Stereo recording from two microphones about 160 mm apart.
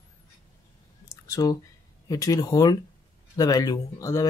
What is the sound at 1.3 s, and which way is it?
Speech, 20° left (ahead or behind).